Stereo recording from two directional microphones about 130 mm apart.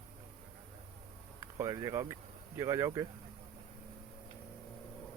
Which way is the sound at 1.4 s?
25° right (ahead or behind).